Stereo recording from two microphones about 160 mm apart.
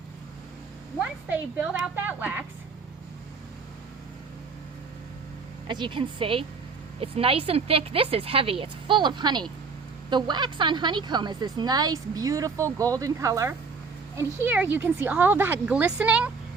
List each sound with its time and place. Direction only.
0.9 s speech: 10° right (ahead or behind)
5.6 s a woman's voice: 30° right (ahead or behind); by 16.3 s 5° right (ahead or behind)